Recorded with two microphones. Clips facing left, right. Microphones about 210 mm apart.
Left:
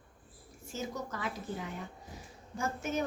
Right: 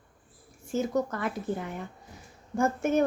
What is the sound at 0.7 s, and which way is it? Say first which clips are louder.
Speech: right 11 dB; 55° right (ahead or behind).